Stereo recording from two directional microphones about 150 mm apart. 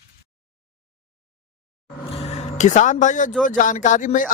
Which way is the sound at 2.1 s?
45° left (ahead or behind).